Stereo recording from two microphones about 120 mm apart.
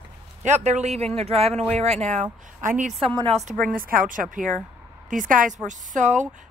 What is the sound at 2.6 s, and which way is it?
Speech, 90° right.